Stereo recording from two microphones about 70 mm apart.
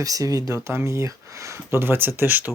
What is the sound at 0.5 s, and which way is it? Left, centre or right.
Speech, right.